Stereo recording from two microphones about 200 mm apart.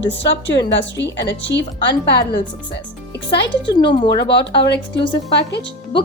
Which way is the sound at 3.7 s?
25° left (ahead or behind).